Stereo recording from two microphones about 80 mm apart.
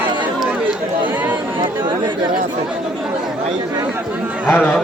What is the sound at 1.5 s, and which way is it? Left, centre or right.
Chatter, right.